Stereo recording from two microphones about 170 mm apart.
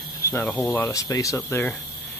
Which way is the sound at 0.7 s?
20° left (ahead or behind).